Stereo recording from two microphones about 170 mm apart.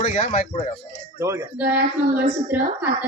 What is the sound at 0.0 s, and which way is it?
Speech, 45° left (ahead or behind).